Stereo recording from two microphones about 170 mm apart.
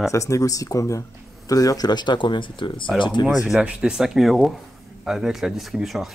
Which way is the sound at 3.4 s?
5° right (ahead or behind).